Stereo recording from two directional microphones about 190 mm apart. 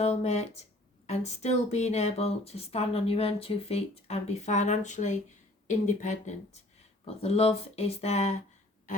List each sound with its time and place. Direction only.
0.0 s speech: 35° left (ahead or behind)